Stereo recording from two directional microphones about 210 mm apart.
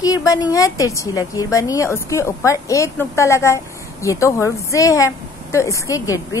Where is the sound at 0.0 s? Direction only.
15° left (ahead or behind).